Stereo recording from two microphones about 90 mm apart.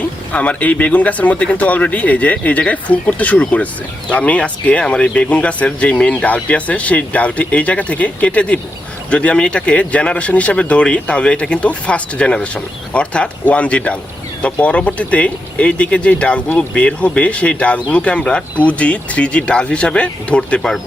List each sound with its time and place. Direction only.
0.3 s speech: 15° left (ahead or behind)